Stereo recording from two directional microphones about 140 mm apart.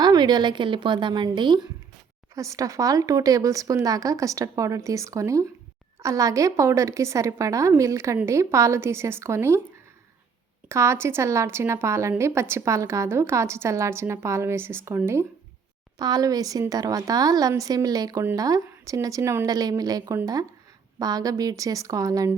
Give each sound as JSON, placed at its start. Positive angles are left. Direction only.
{"t": 0.0, "sound": "a woman's voice", "side_deg": -30}
{"t": 10.7, "sound": "a woman's voice", "side_deg": -20}